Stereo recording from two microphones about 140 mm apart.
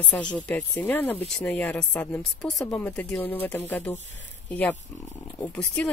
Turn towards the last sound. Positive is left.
turn(degrees=10)  # may be behind; listen again after turning